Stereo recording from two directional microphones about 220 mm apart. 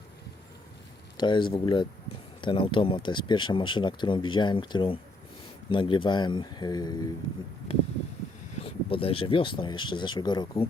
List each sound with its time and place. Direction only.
1.1 s speech: 20° left (ahead or behind)
8.6 s speech: 25° left (ahead or behind)